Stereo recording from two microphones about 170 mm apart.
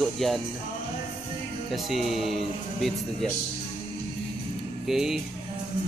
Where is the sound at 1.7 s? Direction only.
Centre (ahead or behind).